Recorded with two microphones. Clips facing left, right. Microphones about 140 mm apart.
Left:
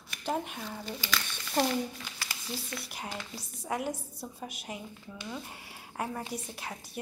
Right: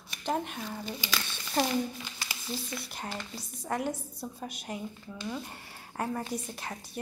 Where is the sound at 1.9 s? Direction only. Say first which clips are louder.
Right 1 dB; 15° right (ahead or behind).